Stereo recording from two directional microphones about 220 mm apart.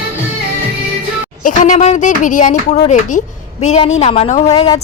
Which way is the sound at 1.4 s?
35° left (ahead or behind).